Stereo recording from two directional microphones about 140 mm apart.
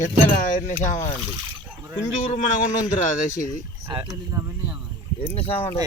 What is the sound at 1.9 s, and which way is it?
Speech, 65° left (ahead or behind).